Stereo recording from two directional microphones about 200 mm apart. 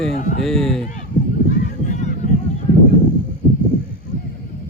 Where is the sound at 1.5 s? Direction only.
40° left (ahead or behind).